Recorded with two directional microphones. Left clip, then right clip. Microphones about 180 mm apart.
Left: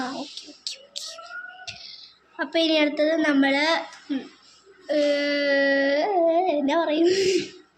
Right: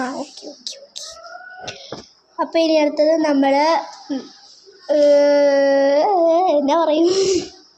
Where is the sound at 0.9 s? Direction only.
25° right (ahead or behind).